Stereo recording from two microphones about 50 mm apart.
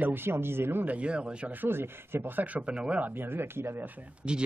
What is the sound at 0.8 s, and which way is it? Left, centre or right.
Speech, right.